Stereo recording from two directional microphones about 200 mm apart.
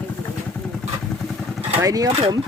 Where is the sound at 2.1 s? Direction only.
30° right (ahead or behind).